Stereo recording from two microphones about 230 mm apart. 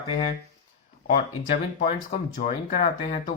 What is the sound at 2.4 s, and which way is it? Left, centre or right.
Speech, left.